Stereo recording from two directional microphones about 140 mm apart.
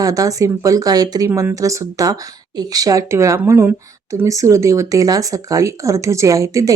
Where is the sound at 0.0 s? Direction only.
25° right (ahead or behind).